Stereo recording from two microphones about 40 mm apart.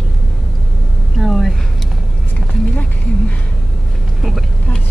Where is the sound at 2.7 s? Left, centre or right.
Left.